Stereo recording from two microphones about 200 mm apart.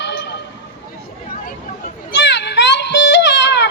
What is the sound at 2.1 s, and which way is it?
Child singing, 60° left (ahead or behind).